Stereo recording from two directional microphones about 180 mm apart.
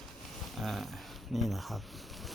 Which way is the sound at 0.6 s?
Centre (ahead or behind).